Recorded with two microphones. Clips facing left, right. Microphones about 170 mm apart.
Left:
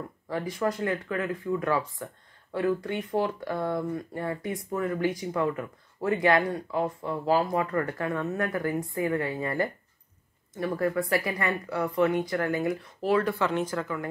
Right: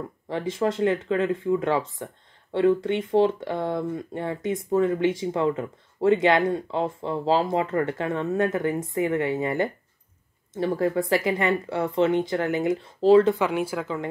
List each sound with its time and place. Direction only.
0.3 s speech: 25° right (ahead or behind)